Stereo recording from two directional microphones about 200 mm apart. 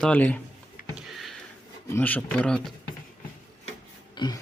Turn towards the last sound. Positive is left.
turn(degrees=20)  # may be behind; listen again after turning